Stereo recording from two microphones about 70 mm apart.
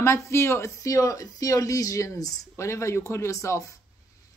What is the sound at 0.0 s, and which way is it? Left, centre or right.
A woman's voice, left.